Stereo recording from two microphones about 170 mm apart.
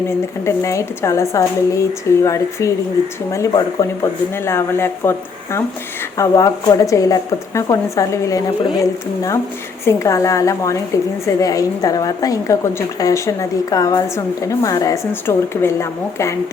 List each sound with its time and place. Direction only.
0.4 s speech: 15° left (ahead or behind)